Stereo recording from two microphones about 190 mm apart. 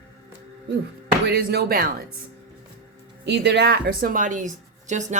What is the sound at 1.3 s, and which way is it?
Speech, 55° right (ahead or behind).